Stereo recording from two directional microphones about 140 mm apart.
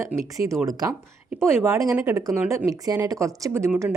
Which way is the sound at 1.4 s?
20° right (ahead or behind).